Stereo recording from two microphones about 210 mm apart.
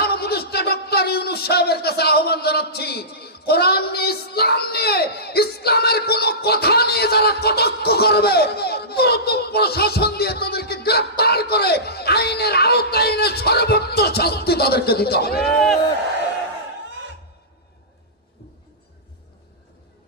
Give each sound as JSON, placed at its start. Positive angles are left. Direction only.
{"t": 0.0, "sound": "a man's voice", "side_deg": 50}